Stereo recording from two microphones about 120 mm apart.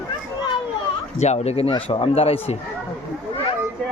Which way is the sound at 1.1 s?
65° left (ahead or behind).